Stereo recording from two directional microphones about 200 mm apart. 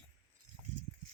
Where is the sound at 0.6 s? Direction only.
20° left (ahead or behind).